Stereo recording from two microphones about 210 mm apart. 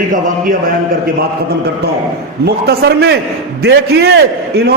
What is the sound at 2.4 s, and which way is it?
A man's voice, 50° right (ahead or behind).